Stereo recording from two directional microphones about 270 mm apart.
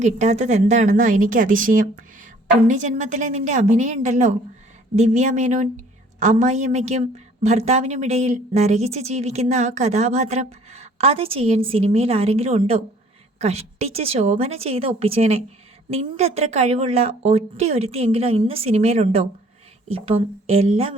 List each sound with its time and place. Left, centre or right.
0.0 s a woman's voice: right